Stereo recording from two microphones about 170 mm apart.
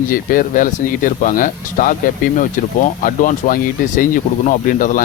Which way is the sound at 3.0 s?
50° left (ahead or behind).